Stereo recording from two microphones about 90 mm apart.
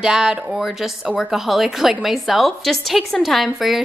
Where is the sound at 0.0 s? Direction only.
5° right (ahead or behind).